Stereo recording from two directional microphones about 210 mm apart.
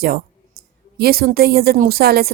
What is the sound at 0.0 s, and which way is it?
A woman's voice, 45° right (ahead or behind).